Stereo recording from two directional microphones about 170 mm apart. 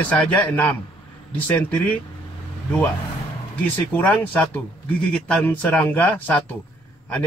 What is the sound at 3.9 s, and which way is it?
Speech, 10° left (ahead or behind).